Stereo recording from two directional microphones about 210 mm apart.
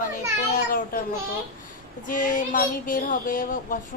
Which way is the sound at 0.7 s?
40° left (ahead or behind).